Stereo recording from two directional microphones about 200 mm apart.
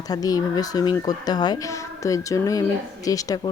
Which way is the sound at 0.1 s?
20° left (ahead or behind).